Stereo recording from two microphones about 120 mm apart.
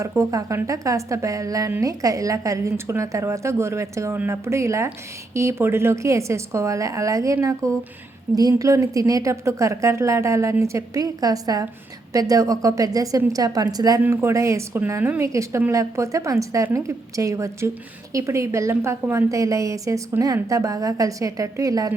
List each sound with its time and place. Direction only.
0.1 s a woman's voice: 25° right (ahead or behind)
14.0 s a woman's voice: 20° right (ahead or behind)